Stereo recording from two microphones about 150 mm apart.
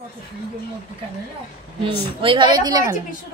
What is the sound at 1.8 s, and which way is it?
Speech, 35° right (ahead or behind).